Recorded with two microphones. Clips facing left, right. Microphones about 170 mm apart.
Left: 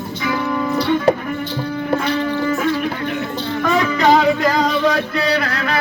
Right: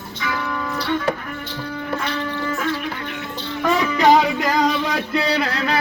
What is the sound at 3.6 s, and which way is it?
Music, 10° right (ahead or behind).